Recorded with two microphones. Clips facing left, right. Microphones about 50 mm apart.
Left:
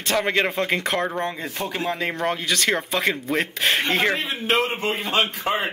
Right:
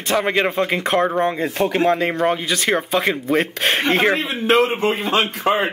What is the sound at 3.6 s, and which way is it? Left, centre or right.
A man's voice, right.